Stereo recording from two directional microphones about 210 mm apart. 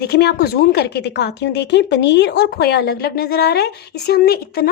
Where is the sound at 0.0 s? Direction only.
50° left (ahead or behind).